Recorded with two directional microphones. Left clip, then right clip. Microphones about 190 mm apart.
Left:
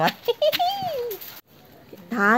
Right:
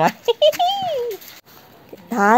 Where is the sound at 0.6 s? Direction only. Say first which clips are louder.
Right 5 dB; 20° right (ahead or behind).